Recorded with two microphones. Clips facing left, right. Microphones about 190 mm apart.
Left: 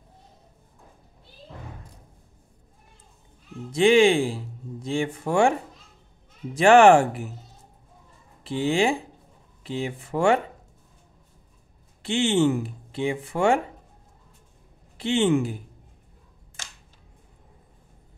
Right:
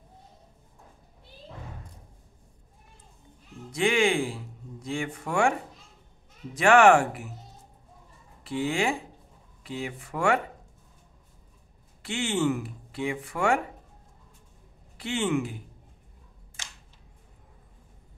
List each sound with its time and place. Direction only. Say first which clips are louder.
3.7 s speech: left 7 dB; 25° left (ahead or behind)
6.5 s speech: left 4 dB; 30° left (ahead or behind)
8.5 s speech: left 5 dB; 25° left (ahead or behind)
12.0 s speech: left 6 dB; 25° left (ahead or behind)
15.0 s speech: left 6 dB; 25° left (ahead or behind)